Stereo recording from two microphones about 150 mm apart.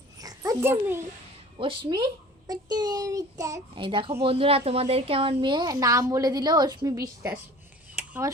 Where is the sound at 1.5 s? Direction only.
35° right (ahead or behind).